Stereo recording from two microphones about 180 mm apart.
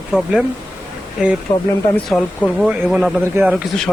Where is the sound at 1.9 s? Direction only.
5° left (ahead or behind).